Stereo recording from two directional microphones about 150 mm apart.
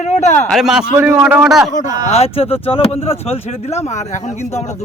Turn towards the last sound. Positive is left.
turn(degrees=50)  # may be behind; listen again after turning